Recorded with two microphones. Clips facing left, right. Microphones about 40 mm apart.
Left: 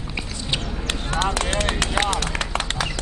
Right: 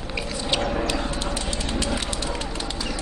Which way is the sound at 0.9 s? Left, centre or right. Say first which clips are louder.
Left 3 dB; left.